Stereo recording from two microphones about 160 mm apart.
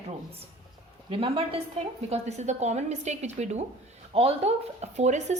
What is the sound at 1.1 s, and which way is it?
A woman's voice, 35° right (ahead or behind).